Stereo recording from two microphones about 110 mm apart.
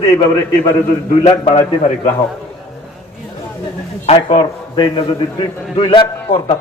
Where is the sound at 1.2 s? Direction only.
75° left (ahead or behind).